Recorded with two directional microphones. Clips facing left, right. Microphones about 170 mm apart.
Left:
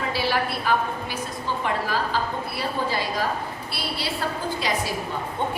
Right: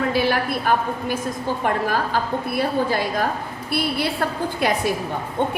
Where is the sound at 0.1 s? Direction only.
50° right (ahead or behind).